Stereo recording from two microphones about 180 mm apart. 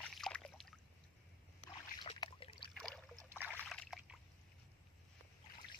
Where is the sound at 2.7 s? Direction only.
5° left (ahead or behind).